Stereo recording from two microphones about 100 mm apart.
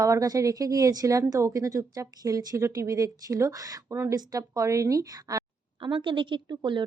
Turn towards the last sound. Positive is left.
turn(degrees=-50)  # may be behind; listen again after turning